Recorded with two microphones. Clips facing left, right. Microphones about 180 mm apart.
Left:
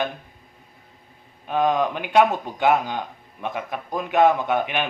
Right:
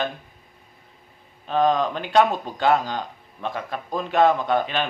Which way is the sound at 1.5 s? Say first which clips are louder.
Right 1 dB; 10° left (ahead or behind).